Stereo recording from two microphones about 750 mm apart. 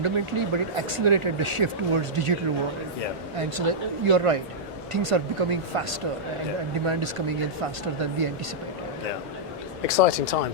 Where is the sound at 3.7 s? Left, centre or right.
Right.